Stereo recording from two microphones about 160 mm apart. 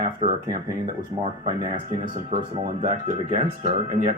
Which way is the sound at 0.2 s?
40° right (ahead or behind).